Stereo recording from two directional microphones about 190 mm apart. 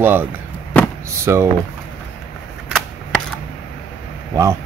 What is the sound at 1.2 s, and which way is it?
Speech, 15° right (ahead or behind).